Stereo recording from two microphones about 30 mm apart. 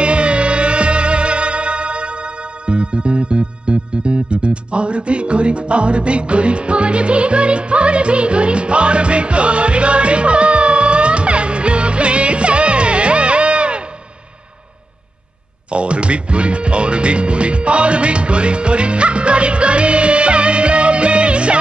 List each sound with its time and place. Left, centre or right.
0.0 s music: right
15.7 s speech: right